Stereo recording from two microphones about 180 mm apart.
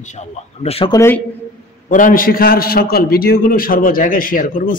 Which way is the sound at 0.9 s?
15° left (ahead or behind).